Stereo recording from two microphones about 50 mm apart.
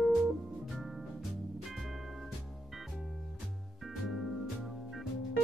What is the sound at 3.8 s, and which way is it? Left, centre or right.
Music, centre.